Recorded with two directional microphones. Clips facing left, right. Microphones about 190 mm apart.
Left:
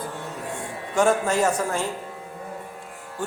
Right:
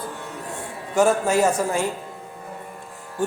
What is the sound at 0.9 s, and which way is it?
Speech, 5° right (ahead or behind).